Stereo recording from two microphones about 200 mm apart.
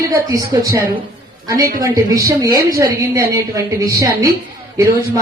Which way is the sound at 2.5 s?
50° right (ahead or behind).